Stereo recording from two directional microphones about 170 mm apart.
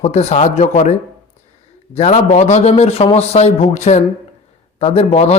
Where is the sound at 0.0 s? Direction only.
40° left (ahead or behind).